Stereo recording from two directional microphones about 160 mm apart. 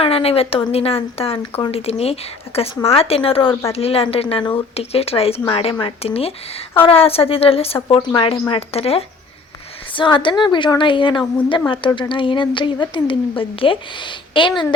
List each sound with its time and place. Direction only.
0.0 s a woman's voice: 35° left (ahead or behind)